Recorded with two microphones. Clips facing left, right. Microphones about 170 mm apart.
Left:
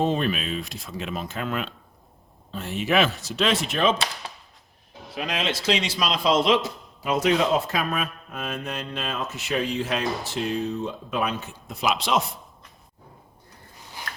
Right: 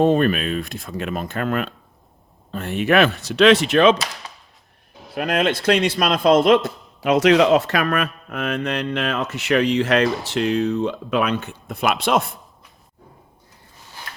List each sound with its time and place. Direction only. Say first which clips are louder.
0.0 s speech: right 7 dB; 55° right (ahead or behind)
3.1 s speech: right 5 dB; centre (ahead or behind)
3.3 s speech: right 11 dB; 75° right (ahead or behind)
5.1 s speech: right 8 dB; 55° right (ahead or behind)
7.0 s speech: right 7 dB; 80° right
9.2 s speech: right 5 dB; centre (ahead or behind)
9.5 s speech: right 9 dB; 90° right
11.7 s speech: right 4 dB; 60° right (ahead or behind)
12.2 s a sound: even; centre (ahead or behind)